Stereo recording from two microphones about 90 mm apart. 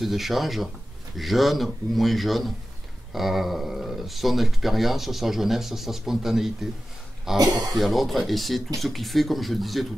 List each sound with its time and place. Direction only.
0.0 s speech: centre (ahead or behind)
7.3 s speech: 45° right (ahead or behind)
7.7 s speech: centre (ahead or behind)